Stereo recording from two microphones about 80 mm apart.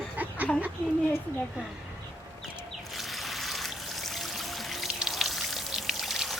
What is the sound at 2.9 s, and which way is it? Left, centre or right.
Music, centre.